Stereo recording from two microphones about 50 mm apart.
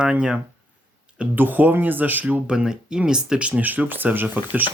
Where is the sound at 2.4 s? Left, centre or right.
Centre.